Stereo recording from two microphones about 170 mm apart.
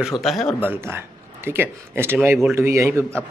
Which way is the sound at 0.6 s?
15° right (ahead or behind).